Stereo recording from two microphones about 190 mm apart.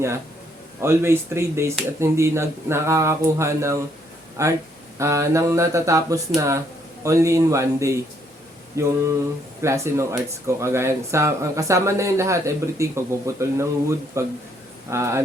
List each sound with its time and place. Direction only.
0.8 s speech: 15° right (ahead or behind)